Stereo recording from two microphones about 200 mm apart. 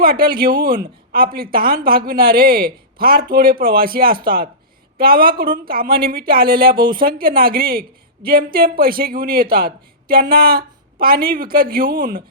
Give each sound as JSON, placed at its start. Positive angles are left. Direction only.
{"t": 0.0, "sound": "a woman's voice", "side_deg": -50}